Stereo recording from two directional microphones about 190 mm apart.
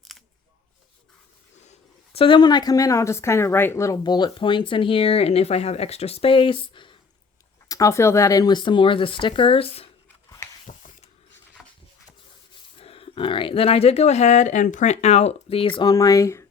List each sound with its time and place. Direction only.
2.1 s speech: 25° left (ahead or behind)
7.7 s speech: 15° left (ahead or behind)
10.7 s spray: 45° left (ahead or behind)
12.7 s speech: 30° left (ahead or behind)